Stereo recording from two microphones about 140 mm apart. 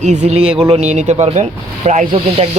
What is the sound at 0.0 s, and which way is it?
Speech, 55° right (ahead or behind).